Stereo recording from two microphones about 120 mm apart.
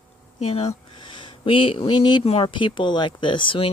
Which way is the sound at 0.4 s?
55° left (ahead or behind).